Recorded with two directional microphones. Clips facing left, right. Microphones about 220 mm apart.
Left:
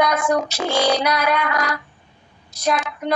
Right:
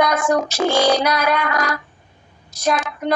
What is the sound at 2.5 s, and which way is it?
Speech, 45° right (ahead or behind).